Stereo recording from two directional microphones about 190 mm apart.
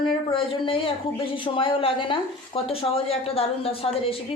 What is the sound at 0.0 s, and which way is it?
A woman's voice, 25° left (ahead or behind).